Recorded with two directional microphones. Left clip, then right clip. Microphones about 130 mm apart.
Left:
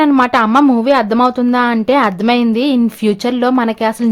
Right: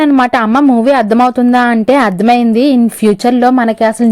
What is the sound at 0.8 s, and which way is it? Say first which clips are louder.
A woman's voice: right 3 dB; 35° right (ahead or behind).